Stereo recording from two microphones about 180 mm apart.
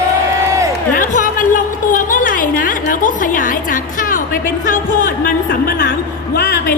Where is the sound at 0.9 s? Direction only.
45° left (ahead or behind); by 6.6 s 65° left (ahead or behind).